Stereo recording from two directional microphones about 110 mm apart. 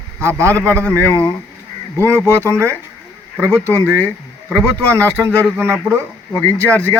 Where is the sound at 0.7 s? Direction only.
15° left (ahead or behind).